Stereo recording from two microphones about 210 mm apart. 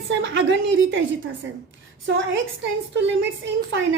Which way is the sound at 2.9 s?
60° right (ahead or behind).